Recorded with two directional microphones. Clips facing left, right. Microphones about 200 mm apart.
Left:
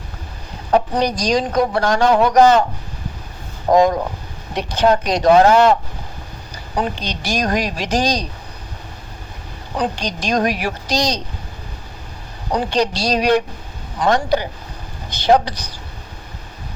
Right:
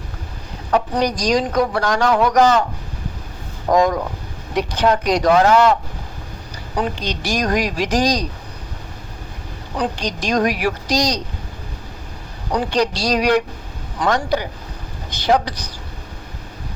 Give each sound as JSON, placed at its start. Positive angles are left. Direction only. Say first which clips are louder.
{"t": 0.7, "sound": "a man's voice", "louder": "left 2 dB", "side_deg": 25}
{"t": 3.7, "sound": "a man's voice", "louder": "left 2 dB", "side_deg": 25}
{"t": 6.7, "sound": "a man's voice", "louder": "even", "side_deg": 25}
{"t": 9.7, "sound": "a man's voice", "louder": "left 1 dB", "side_deg": 25}
{"t": 12.5, "sound": "a man's voice", "louder": "even", "side_deg": 25}